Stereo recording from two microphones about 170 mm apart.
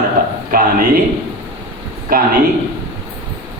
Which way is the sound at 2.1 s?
55° right (ahead or behind).